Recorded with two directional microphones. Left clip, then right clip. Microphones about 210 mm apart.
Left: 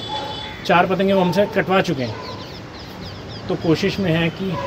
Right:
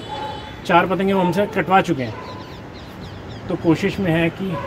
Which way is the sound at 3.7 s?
20° left (ahead or behind).